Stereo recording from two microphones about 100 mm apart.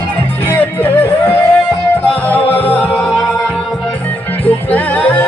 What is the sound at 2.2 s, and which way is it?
Music, 15° left (ahead or behind).